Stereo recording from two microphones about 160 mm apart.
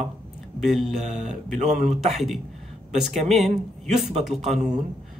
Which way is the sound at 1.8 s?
Centre (ahead or behind).